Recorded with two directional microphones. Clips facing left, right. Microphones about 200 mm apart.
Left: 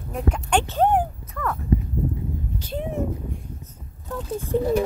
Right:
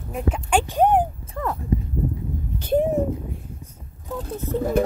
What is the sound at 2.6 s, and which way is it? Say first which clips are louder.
Speech: right 12 dB; 50° right (ahead or behind).